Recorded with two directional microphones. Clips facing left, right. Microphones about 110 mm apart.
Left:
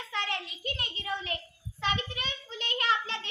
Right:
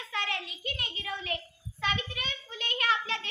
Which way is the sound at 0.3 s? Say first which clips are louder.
Left 1 dB; 30° left (ahead or behind).